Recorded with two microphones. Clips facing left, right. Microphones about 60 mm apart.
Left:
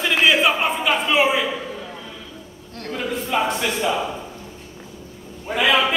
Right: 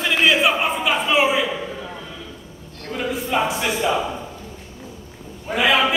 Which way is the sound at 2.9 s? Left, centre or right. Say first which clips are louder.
Right 1 dB; centre.